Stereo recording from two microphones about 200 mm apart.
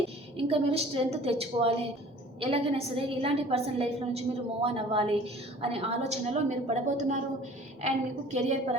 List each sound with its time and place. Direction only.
0.3 s a woman's voice: 30° right (ahead or behind)